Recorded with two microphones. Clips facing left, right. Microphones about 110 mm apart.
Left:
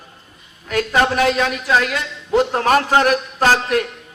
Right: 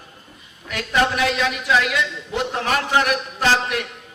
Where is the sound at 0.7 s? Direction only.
45° left (ahead or behind).